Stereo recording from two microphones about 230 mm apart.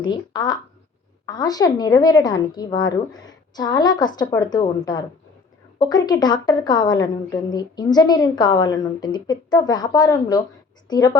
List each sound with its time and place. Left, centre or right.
0.0 s a woman's voice: centre